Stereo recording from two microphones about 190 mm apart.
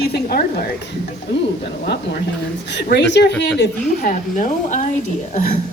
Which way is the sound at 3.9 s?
40° left (ahead or behind).